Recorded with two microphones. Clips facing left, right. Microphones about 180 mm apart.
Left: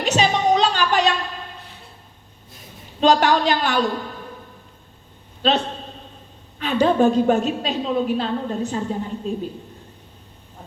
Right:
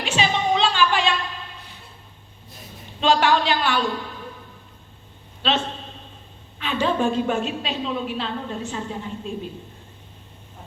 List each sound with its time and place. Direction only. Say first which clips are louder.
0.0 s a sound: left 4 dB; 40° left (ahead or behind)
3.0 s a woman's voice: left 3 dB; 40° left (ahead or behind)
5.4 s a man's voice: left 4 dB; 40° left (ahead or behind)